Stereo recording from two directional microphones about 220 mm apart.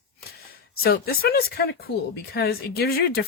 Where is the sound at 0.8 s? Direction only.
45° left (ahead or behind).